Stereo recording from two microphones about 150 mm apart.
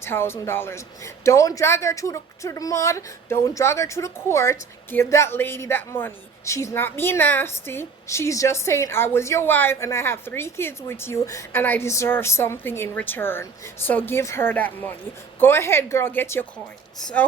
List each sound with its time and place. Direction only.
0.0 s speech: 15° left (ahead or behind)